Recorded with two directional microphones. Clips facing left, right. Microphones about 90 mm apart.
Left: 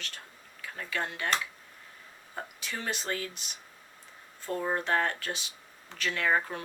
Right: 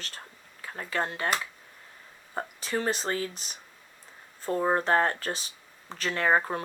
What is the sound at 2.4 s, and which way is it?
Speech, 40° right (ahead or behind).